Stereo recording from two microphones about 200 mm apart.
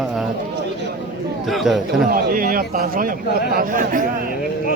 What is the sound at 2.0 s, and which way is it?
Speech, 45° right (ahead or behind).